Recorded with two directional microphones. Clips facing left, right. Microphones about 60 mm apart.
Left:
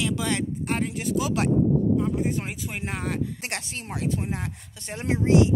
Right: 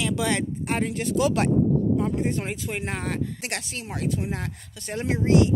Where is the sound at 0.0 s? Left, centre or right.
Centre.